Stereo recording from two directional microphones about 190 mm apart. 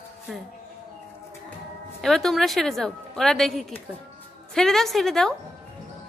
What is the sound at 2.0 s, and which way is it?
A woman's voice, centre (ahead or behind).